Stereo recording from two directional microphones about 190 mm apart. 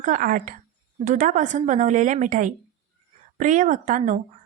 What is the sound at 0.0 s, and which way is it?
A woman's voice, 45° right (ahead or behind).